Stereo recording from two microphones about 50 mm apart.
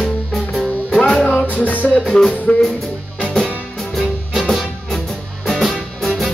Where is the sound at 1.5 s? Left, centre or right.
Left.